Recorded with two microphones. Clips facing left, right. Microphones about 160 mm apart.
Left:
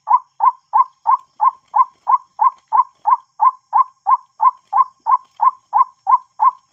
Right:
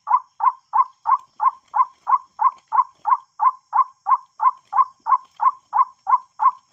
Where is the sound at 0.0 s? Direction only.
35° left (ahead or behind).